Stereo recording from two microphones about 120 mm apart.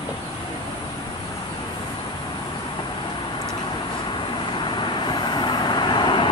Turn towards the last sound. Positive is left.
turn(degrees=40)  # may be behind; listen again after turning